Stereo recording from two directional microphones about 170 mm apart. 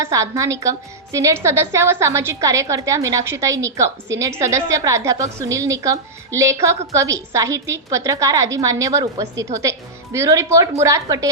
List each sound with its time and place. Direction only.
0.0 s a woman's voice: 20° right (ahead or behind)